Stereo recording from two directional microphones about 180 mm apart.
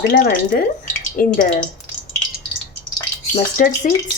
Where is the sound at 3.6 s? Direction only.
50° left (ahead or behind).